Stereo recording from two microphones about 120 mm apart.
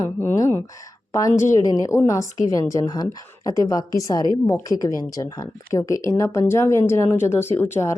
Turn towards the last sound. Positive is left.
turn(degrees=20)  # may be behind; listen again after turning